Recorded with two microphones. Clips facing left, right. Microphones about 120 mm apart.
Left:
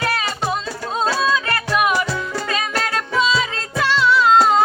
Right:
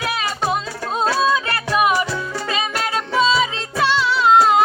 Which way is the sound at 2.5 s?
10° right (ahead or behind).